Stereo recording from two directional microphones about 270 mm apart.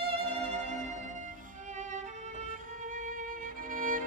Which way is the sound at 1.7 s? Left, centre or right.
Right.